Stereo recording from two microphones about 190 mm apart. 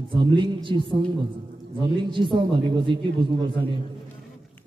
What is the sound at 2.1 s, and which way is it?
Speech, 25° right (ahead or behind).